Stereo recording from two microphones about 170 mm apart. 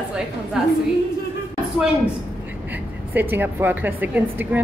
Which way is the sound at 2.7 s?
10° right (ahead or behind).